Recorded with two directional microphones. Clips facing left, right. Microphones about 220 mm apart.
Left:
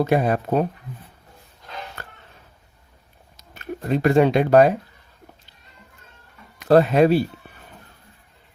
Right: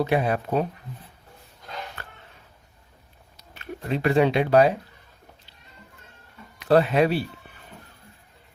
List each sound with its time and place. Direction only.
0.0 s speech: 45° left (ahead or behind)
2.0 s a sound: 40° left (ahead or behind)
3.3 s speech: 45° left (ahead or behind)
6.6 s speech: 45° left (ahead or behind)